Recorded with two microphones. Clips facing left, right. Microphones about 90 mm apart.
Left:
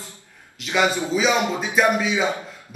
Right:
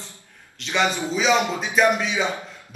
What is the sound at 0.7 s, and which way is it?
A man's voice, 5° left (ahead or behind).